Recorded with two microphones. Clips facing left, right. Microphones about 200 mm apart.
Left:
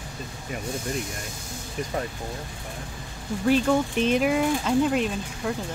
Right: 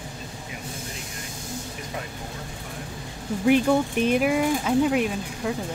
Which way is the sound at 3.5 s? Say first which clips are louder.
Right 2 dB; 15° right (ahead or behind).